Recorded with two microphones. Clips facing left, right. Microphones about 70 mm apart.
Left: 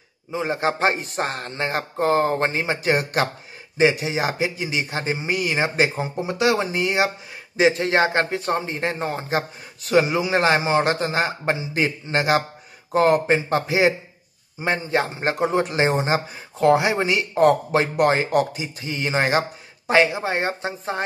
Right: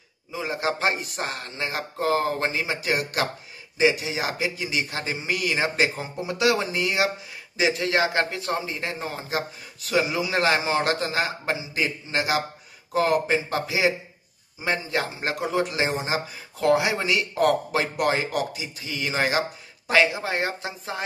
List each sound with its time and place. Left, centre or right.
0.3 s a man's voice: left